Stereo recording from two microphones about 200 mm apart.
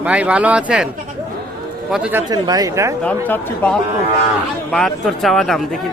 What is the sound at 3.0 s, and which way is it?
Speech, 10° left (ahead or behind).